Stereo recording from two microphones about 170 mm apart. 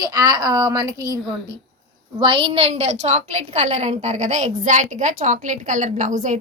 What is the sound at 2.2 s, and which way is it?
A woman's voice, 30° right (ahead or behind).